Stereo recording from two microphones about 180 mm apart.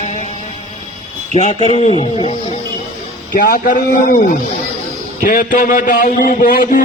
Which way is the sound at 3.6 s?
45° left (ahead or behind).